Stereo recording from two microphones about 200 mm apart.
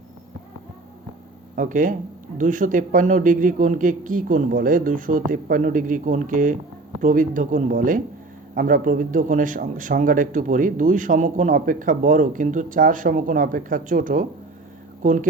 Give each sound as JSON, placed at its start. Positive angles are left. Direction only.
{"t": 1.5, "sound": "speech", "side_deg": -40}